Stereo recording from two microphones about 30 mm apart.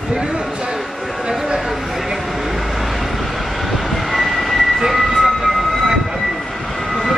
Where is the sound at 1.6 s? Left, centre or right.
Centre.